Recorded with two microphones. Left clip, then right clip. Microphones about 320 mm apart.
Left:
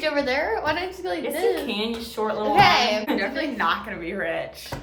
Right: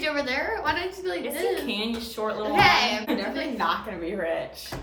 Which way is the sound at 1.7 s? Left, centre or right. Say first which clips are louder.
Left 2 dB; centre.